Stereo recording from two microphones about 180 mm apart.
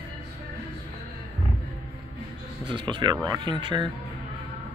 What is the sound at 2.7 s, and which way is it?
Speech, 25° right (ahead or behind).